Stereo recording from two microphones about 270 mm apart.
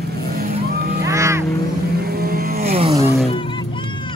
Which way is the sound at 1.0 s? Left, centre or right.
Centre.